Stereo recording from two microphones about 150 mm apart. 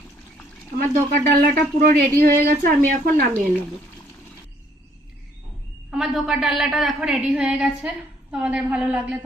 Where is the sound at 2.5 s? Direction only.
70° right (ahead or behind).